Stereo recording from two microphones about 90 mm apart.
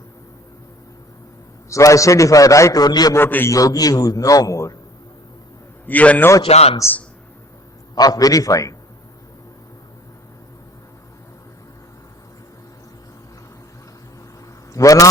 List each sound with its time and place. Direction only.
1.7 s a man's voice: 35° left (ahead or behind)
3.2 s a man's voice: 25° left (ahead or behind)
3.5 s a man's voice: 40° left (ahead or behind)
5.8 s a man's voice: 15° left (ahead or behind)
6.5 s a man's voice: 90° left
7.9 s a man's voice: 45° left (ahead or behind)
14.7 s a man's voice: 40° left (ahead or behind)